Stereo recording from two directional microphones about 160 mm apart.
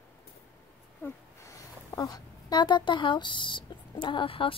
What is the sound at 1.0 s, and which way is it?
Speech, 20° left (ahead or behind).